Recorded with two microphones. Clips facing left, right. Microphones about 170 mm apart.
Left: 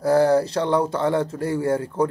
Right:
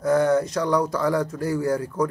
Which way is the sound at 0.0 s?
30° left (ahead or behind).